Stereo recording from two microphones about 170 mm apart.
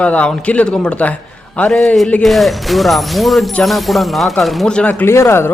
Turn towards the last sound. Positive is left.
turn(degrees=15)  # may be behind; listen again after turning